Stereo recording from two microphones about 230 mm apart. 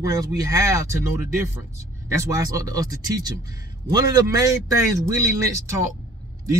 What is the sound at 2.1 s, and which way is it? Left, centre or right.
Speech, centre.